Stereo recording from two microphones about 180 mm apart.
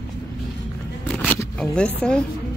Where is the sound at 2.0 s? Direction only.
5° left (ahead or behind).